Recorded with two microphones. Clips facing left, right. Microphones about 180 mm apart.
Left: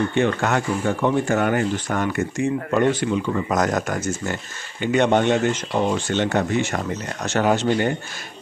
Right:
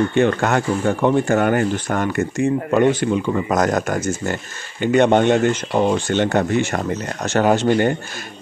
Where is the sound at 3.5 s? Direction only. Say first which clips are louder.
Right 3 dB; 45° right (ahead or behind).